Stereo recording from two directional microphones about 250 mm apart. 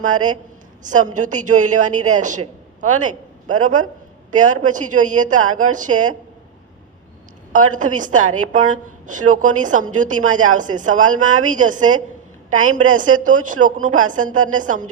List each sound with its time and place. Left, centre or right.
0.0 s a woman's voice: right
7.5 s a woman's voice: right